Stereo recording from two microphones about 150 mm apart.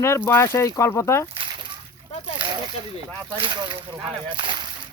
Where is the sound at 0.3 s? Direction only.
20° left (ahead or behind).